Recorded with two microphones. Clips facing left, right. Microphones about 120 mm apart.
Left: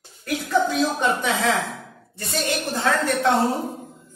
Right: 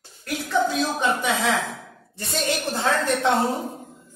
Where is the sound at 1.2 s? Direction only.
15° right (ahead or behind).